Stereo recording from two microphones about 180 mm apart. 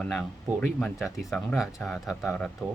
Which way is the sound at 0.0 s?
5° left (ahead or behind).